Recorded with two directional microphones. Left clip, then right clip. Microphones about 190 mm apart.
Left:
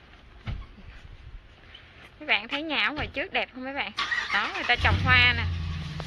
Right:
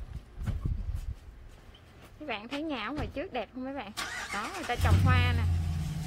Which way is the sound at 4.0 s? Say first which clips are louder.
Left 9 dB; 90° right.